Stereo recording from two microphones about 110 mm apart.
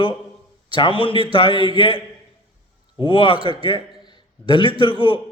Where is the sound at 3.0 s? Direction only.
50° left (ahead or behind).